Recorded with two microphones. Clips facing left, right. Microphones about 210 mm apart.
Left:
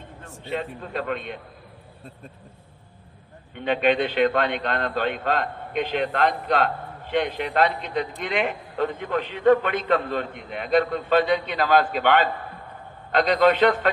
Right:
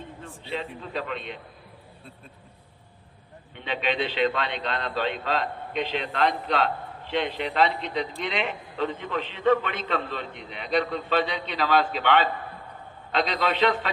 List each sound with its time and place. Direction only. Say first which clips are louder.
0.2 s a man's voice: left 4 dB; 45° left (ahead or behind)
3.6 s a man's voice: left 7 dB; 50° left (ahead or behind)